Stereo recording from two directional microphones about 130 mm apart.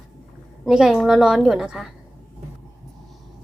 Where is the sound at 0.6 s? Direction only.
5° right (ahead or behind).